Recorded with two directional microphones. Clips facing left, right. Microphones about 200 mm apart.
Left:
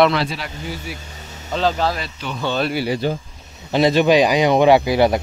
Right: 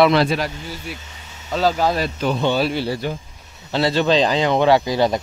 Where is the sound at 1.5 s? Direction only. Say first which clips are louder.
Right 1 dB; 10° right (ahead or behind).